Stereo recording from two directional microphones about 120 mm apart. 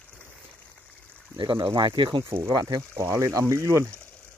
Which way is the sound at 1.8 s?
35° right (ahead or behind).